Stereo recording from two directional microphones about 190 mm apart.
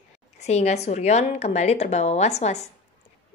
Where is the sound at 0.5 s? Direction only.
35° left (ahead or behind).